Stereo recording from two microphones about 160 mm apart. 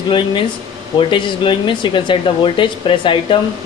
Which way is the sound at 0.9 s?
30° left (ahead or behind).